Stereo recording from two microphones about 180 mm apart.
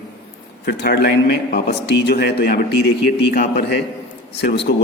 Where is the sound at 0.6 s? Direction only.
70° left (ahead or behind).